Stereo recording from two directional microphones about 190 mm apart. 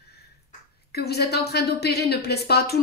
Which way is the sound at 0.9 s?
60° left (ahead or behind).